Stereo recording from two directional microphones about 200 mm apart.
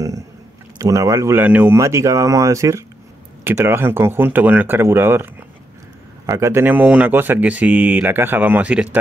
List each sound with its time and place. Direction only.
0.7 s speech: 15° right (ahead or behind)